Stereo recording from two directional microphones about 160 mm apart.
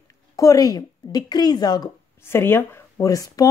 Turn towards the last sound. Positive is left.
turn(degrees=20)  # may be behind; listen again after turning